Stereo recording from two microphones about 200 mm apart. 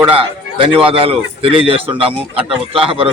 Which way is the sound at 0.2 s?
25° right (ahead or behind).